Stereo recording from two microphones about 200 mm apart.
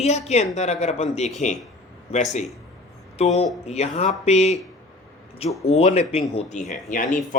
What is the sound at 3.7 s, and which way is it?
Speech, 35° left (ahead or behind).